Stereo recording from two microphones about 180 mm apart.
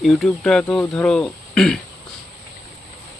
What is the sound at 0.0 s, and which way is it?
Speech, centre (ahead or behind).